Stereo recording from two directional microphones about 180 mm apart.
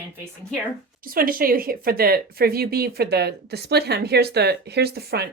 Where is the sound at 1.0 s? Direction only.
55° right (ahead or behind).